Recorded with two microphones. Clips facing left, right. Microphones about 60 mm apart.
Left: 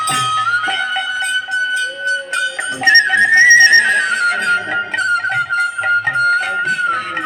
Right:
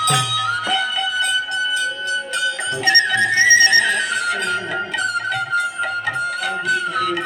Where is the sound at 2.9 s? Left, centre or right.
Left.